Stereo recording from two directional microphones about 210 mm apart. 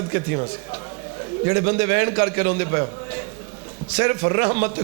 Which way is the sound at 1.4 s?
15° right (ahead or behind).